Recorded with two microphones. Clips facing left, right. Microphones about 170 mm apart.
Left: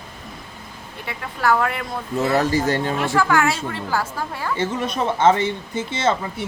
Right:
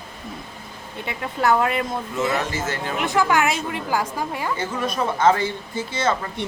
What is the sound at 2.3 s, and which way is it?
Speech, 35° left (ahead or behind).